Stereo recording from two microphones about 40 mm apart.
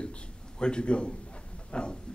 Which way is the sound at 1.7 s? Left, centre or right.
Left.